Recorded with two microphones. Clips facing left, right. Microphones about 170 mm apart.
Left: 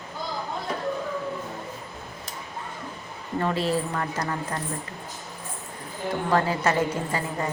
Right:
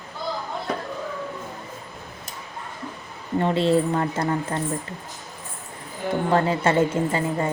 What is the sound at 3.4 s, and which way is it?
A woman's voice, 25° right (ahead or behind).